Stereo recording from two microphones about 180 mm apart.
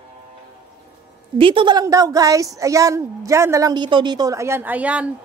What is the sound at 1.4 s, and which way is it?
A woman's voice, 30° right (ahead or behind).